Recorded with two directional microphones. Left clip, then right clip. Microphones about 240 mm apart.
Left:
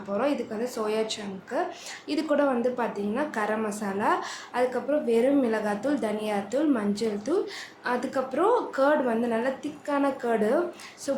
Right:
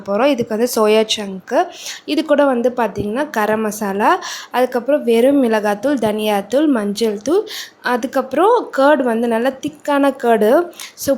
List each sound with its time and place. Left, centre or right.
0.1 s a woman's voice: right